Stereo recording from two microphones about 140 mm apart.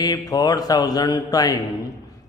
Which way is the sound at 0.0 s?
30° left (ahead or behind).